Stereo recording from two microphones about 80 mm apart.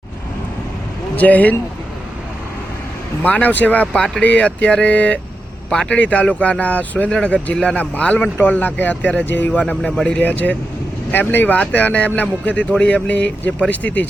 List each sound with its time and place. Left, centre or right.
1.1 s speech: centre
3.2 s speech: centre